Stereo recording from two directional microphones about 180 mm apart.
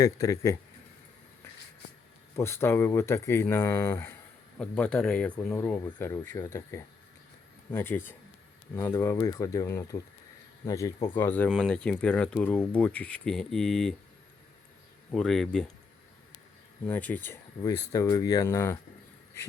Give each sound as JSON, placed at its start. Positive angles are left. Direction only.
{"t": 0.0, "sound": "speech", "side_deg": 20}
{"t": 2.3, "sound": "speech", "side_deg": 15}
{"t": 15.1, "sound": "speech", "side_deg": 0}
{"t": 16.8, "sound": "speech", "side_deg": 10}